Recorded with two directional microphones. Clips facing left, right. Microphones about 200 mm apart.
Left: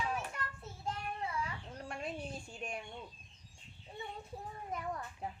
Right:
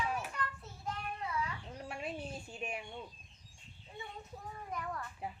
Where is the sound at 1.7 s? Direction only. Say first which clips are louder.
Even; 5° right (ahead or behind).